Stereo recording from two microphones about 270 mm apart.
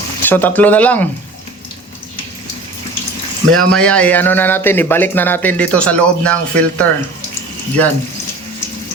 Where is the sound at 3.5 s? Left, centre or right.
Centre.